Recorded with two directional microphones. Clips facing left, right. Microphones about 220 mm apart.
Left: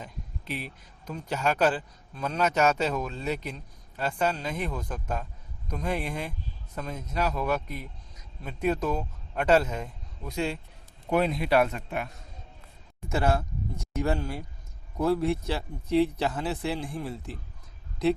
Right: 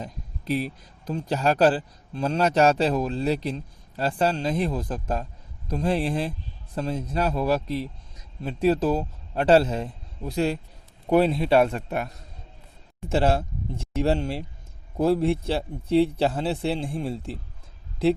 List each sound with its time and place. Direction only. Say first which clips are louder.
0.0 s speech: right 5 dB; 40° right (ahead or behind)
13.1 s a man's voice: right 4 dB; 30° right (ahead or behind)